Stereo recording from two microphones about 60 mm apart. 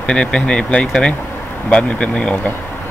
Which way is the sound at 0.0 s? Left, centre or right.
Centre.